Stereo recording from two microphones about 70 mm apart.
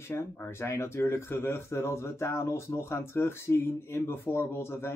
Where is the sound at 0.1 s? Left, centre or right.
Left.